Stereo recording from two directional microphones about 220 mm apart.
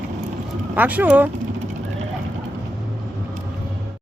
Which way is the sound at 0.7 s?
5° right (ahead or behind).